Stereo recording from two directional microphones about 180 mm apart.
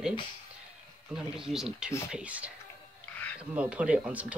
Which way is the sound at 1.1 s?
5° right (ahead or behind).